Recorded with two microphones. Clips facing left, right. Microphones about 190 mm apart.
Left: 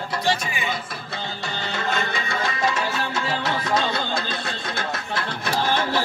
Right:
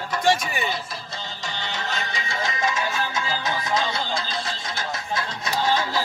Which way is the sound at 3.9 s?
60° left (ahead or behind).